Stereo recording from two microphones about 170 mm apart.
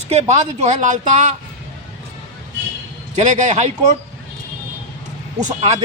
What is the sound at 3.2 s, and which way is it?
Speech, 45° right (ahead or behind).